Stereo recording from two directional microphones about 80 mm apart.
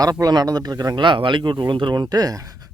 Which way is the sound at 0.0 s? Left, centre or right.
Right.